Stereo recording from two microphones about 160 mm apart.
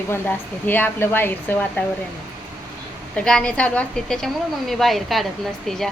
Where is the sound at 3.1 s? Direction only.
5° left (ahead or behind).